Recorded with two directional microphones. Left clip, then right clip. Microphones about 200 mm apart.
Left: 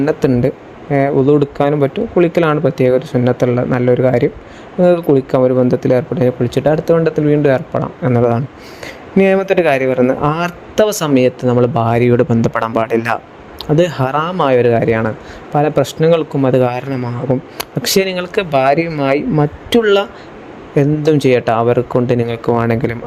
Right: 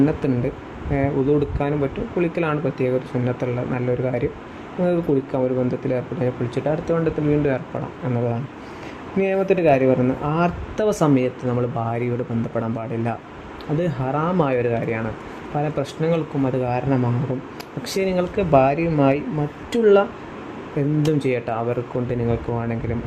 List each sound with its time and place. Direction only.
0.0 s speech: 45° left (ahead or behind)